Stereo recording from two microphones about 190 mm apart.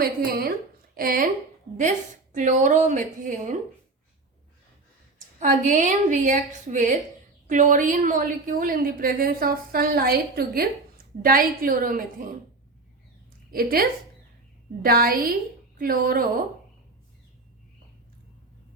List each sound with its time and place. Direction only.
0.0 s a woman's voice: 55° right (ahead or behind)
2.3 s a woman's voice: 40° right (ahead or behind)
5.4 s a woman's voice: 40° right (ahead or behind)
13.5 s a woman's voice: 50° right (ahead or behind)
14.8 s a woman's voice: 50° right (ahead or behind)